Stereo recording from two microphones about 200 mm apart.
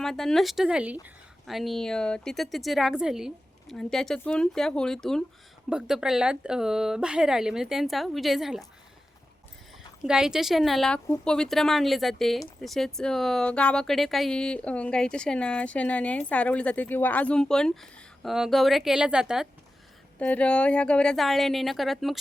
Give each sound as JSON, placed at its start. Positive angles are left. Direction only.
{"t": 0.0, "sound": "a woman's voice", "side_deg": 0}
{"t": 10.0, "sound": "a woman's voice", "side_deg": -5}